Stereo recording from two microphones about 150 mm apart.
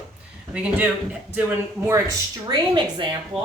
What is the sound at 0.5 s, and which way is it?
Speech, 5° right (ahead or behind).